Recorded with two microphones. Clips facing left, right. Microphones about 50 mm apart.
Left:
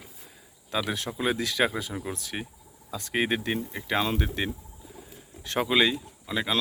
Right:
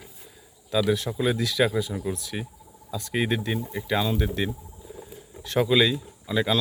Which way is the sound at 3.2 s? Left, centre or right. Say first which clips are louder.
Even; left.